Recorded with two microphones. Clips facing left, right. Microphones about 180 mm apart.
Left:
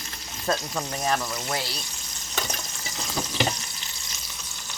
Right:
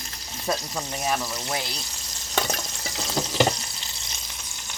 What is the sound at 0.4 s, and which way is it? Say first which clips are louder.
Speech: left 1 dB; 10° right (ahead or behind).